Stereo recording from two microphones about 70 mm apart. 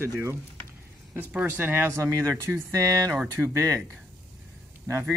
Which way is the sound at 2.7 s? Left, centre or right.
Right.